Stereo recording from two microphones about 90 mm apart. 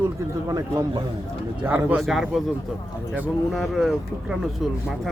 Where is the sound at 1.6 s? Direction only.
20° right (ahead or behind).